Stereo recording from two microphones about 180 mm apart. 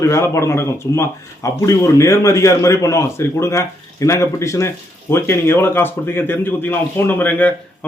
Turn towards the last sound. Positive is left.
turn(degrees=10)  # may be behind; listen again after turning